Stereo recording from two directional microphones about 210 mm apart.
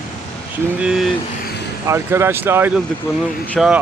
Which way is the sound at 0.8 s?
Centre (ahead or behind).